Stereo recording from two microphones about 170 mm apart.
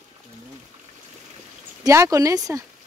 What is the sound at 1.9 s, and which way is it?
Speech, 20° right (ahead or behind).